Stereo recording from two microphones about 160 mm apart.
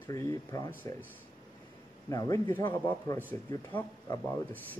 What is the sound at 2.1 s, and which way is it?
Speech, 20° left (ahead or behind).